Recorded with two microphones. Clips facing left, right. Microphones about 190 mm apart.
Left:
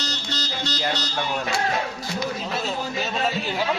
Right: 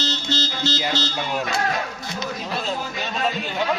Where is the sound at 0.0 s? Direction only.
25° right (ahead or behind).